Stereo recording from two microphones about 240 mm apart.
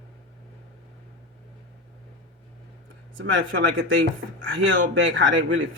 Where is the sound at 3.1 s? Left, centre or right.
Right.